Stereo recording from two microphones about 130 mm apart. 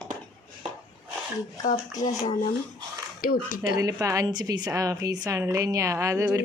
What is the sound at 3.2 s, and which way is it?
Speech, 90° left.